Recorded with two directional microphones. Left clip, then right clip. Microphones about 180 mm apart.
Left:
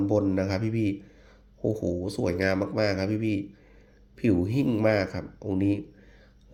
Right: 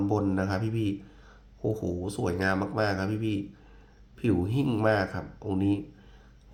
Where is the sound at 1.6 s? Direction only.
20° left (ahead or behind).